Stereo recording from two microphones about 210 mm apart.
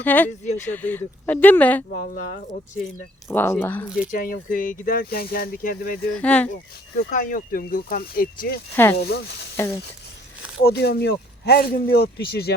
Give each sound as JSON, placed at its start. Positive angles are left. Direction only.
{"t": 0.0, "sound": "speech", "side_deg": 10}
{"t": 1.9, "sound": "speech", "side_deg": 40}
{"t": 3.2, "sound": "speech", "side_deg": 10}
{"t": 4.1, "sound": "speech", "side_deg": 40}
{"t": 6.1, "sound": "speech", "side_deg": 5}
{"t": 6.9, "sound": "speech", "side_deg": 40}
{"t": 8.7, "sound": "speech", "side_deg": 10}
{"t": 9.0, "sound": "speech", "side_deg": 50}
{"t": 9.6, "sound": "speech", "side_deg": 10}
{"t": 10.6, "sound": "speech", "side_deg": 50}